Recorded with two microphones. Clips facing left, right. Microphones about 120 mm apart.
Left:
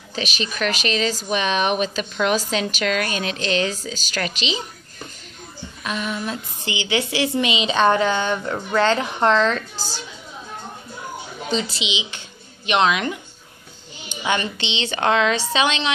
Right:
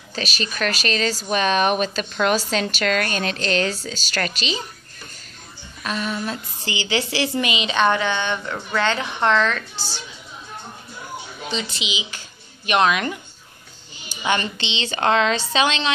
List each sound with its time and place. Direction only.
0.1 s speech: 15° left (ahead or behind)
5.9 s a woman's voice: 15° left (ahead or behind); by 10.0 s 30° left (ahead or behind)
11.7 s speech: 25° left (ahead or behind)
12.6 s speech: 15° left (ahead or behind)
14.2 s speech: 10° left (ahead or behind)